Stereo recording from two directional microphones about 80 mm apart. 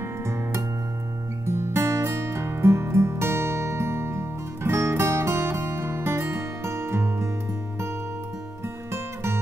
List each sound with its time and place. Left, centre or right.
0.3 s music: right
8.9 s music: right